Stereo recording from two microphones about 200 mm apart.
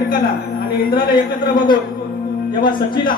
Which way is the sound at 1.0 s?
45° left (ahead or behind).